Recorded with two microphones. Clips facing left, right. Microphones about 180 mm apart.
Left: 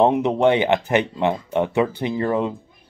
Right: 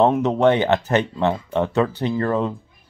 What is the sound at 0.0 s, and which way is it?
Speech, 15° left (ahead or behind).